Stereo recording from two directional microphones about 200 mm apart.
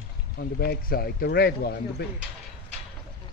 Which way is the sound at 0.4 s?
50° left (ahead or behind).